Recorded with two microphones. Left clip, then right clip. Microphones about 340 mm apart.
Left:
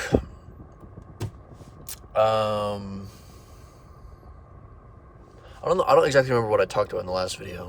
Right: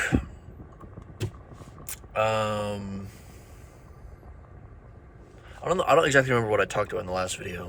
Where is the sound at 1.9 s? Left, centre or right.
Centre.